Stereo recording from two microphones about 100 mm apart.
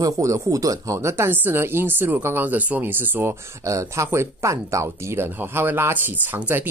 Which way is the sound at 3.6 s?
30° right (ahead or behind).